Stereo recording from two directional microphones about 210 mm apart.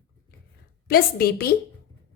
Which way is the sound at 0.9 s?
45° left (ahead or behind).